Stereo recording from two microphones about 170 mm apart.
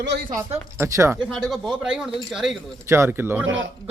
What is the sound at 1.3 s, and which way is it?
Speech, centre (ahead or behind).